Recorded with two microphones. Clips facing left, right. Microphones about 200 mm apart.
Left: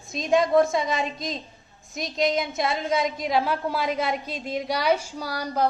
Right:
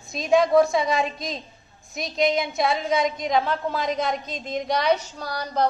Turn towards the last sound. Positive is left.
turn(degrees=10)  # may be behind; listen again after turning